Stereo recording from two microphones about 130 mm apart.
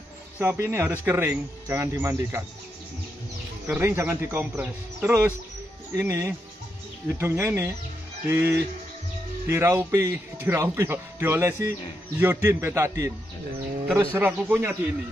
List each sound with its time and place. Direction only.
0.4 s a man's voice: 15° right (ahead or behind)
3.6 s a man's voice: 15° right (ahead or behind)